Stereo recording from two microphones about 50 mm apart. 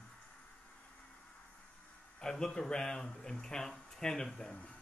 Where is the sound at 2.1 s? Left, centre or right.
Centre.